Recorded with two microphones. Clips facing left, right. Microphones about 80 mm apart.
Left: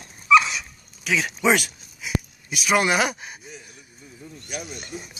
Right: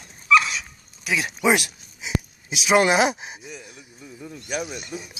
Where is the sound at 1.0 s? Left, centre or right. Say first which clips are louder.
Even; centre.